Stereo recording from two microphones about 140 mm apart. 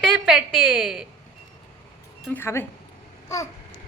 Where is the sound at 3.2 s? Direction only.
20° left (ahead or behind).